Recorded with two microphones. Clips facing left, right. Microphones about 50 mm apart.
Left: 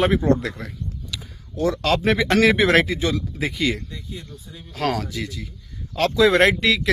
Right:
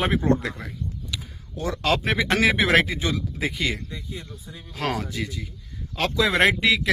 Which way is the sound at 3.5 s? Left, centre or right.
Right.